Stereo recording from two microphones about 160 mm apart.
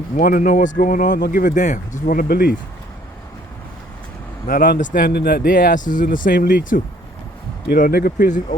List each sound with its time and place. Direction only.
0.2 s speech: 60° left (ahead or behind); by 2.6 s 80° left
4.4 s speech: 60° left (ahead or behind)
7.7 s speech: 75° left (ahead or behind)